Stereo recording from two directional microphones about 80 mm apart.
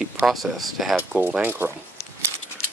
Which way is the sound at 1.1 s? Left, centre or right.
Centre.